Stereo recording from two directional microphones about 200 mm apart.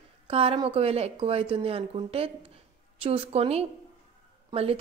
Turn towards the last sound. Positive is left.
turn(degrees=-30)  # may be behind; listen again after turning